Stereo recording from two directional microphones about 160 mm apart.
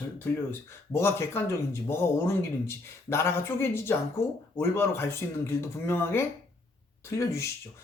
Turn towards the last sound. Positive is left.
turn(degrees=15)  # may be behind; listen again after turning